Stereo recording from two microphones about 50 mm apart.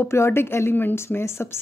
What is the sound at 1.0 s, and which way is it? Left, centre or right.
Speech, left.